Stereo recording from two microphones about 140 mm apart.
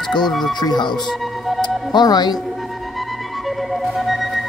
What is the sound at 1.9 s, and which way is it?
Speech, 30° left (ahead or behind).